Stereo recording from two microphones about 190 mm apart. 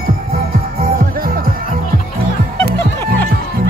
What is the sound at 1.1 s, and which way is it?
Music, 50° right (ahead or behind).